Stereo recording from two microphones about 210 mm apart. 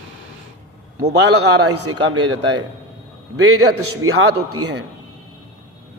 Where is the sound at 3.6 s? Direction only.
85° right.